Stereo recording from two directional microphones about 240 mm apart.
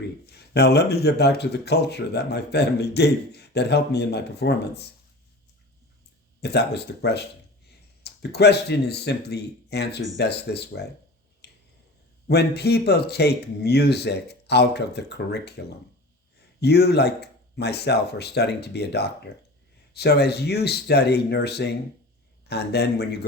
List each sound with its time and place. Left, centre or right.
0.3 s speech: left
6.4 s speech: left
12.3 s speech: left